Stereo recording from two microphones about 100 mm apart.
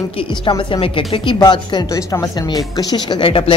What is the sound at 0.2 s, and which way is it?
Speech, 55° left (ahead or behind).